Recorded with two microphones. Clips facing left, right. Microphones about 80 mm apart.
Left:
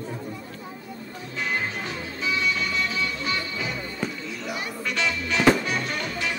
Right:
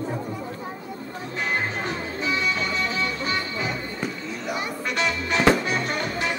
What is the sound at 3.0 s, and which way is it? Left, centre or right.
Music, right.